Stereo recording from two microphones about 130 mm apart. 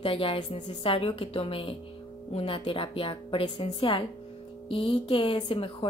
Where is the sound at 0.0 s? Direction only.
45° left (ahead or behind).